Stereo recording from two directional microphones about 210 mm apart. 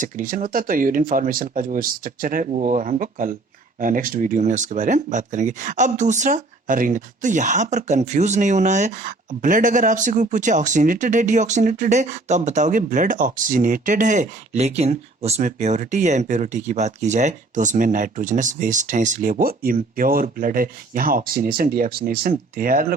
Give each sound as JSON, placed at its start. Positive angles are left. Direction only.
{"t": 0.0, "sound": "speech", "side_deg": -40}